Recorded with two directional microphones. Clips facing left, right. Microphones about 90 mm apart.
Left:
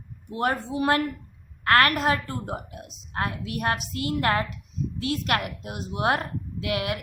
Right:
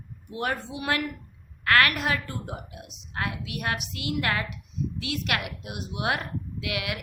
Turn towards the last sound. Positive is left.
turn(degrees=35)  # may be behind; listen again after turning